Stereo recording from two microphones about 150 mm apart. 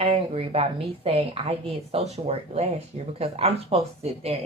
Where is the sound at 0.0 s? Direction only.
40° right (ahead or behind).